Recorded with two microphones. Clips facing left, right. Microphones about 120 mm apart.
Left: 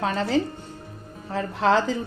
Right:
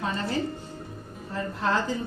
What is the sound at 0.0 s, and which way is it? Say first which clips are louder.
A woman's voice: left 5 dB; 80° left.